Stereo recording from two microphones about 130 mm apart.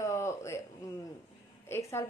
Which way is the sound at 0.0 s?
25° left (ahead or behind).